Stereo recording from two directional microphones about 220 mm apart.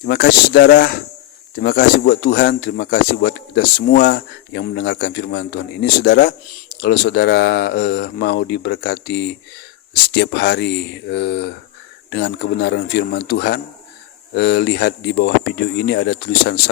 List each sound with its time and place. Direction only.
0.0 s a man's voice: 50° left (ahead or behind)